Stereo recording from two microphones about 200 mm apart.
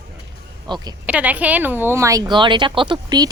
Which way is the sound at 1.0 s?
5° right (ahead or behind).